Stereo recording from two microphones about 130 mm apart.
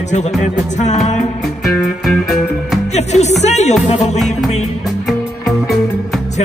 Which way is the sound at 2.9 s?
60° left (ahead or behind).